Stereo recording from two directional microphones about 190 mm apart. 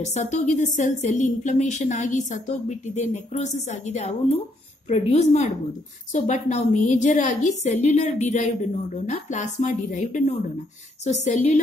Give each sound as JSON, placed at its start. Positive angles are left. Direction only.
{"t": 0.0, "sound": "a woman's voice", "side_deg": 35}